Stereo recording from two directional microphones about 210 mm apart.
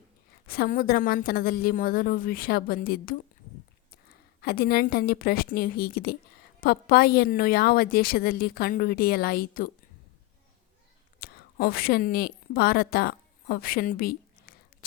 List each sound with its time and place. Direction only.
0.4 s a woman's voice: 45° left (ahead or behind)
11.2 s a woman's voice: 45° left (ahead or behind)